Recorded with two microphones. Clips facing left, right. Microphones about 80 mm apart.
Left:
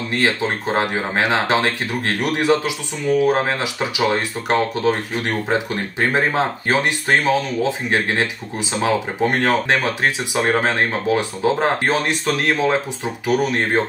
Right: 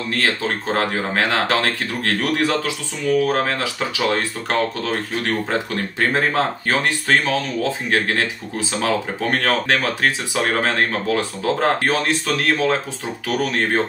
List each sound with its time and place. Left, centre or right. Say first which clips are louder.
0.1 s speech: left 2 dB; centre